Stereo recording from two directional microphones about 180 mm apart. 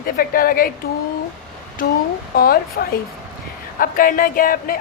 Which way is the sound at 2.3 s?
55° left (ahead or behind).